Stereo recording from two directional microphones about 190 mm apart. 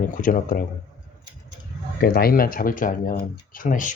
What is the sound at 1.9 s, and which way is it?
Speech, 50° left (ahead or behind).